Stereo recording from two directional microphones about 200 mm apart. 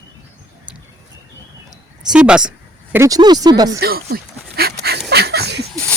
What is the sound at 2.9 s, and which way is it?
Speech, 15° right (ahead or behind).